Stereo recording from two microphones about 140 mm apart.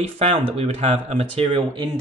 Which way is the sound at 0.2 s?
50° right (ahead or behind).